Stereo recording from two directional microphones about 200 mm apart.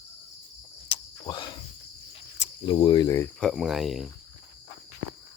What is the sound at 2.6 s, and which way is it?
Speech, 20° left (ahead or behind).